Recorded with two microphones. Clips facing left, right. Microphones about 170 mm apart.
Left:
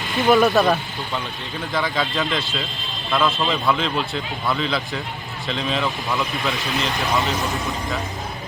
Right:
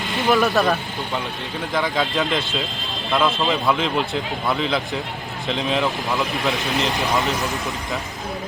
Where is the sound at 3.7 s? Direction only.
15° right (ahead or behind).